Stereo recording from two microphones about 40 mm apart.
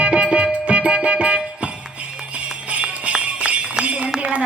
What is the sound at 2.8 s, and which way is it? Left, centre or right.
Jingle bell, right.